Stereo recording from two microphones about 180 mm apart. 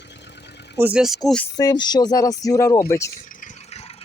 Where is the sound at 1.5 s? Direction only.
20° left (ahead or behind).